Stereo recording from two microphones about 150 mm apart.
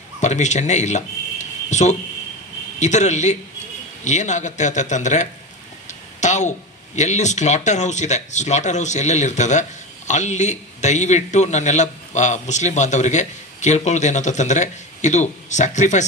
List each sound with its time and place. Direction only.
0.2 s speech: 50° left (ahead or behind)
5.9 s a sound: 50° left (ahead or behind)
7.0 s speech: 50° left (ahead or behind)